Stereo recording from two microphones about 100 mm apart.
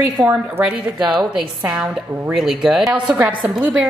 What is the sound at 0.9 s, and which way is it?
Speech, 50° right (ahead or behind).